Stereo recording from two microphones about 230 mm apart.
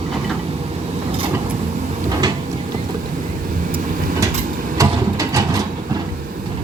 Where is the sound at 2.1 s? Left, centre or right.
Centre.